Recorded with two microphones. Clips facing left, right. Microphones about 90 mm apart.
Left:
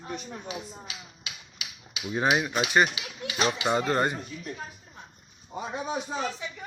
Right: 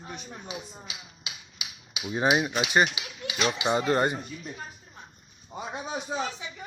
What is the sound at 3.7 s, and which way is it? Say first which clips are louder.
Speech: right 3 dB; 5° right (ahead or behind).